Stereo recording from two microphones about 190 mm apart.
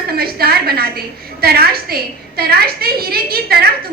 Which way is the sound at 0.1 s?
55° right (ahead or behind).